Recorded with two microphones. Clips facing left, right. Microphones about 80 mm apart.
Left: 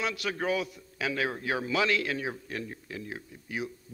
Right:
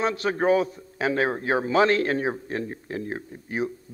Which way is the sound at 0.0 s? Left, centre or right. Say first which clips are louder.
Right 8 dB; right.